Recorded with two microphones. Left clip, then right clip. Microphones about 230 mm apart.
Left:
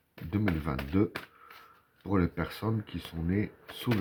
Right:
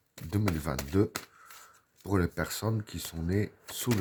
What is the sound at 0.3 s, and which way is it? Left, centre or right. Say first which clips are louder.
Speech: even; right.